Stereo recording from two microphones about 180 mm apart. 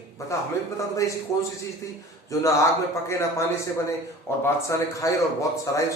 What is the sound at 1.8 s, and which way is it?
A man's voice, 15° left (ahead or behind).